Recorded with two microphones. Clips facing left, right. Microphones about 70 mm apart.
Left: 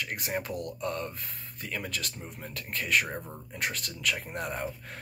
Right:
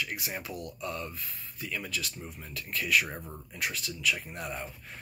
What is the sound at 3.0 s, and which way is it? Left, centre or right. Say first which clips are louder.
Speech: left 3 dB; centre.